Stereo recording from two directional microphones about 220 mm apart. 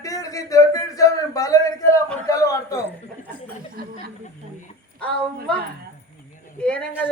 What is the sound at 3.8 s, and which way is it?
Speech, 45° right (ahead or behind).